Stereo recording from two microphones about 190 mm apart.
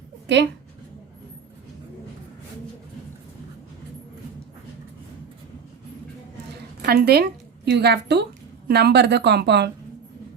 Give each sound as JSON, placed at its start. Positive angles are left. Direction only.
{"t": 0.3, "sound": "speech", "side_deg": -65}
{"t": 6.8, "sound": "a woman's voice", "side_deg": -55}